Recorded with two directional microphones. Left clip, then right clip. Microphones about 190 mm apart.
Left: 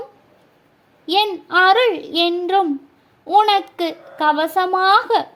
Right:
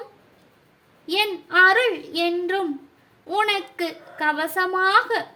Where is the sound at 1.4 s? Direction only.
35° left (ahead or behind).